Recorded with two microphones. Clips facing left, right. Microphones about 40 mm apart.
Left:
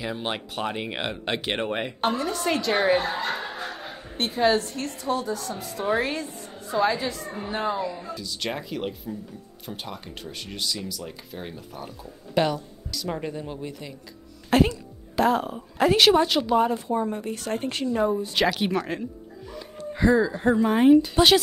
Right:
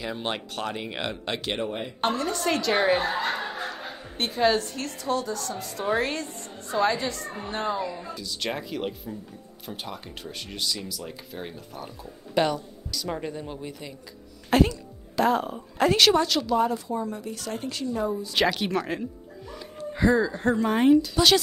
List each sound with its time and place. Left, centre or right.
0.0 s speech: centre
0.7 s speech: centre
1.6 s speech: left
2.0 s a woman's voice: centre
3.1 s speech: right
3.3 s a woman's voice: centre; by 18.3 s left
18.3 s a woman's voice: centre
18.6 s music: centre
20.2 s speech: centre
21.0 s speech: left